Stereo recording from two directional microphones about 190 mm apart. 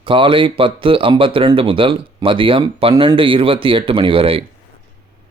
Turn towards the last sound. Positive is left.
turn(degrees=-30)  # may be behind; listen again after turning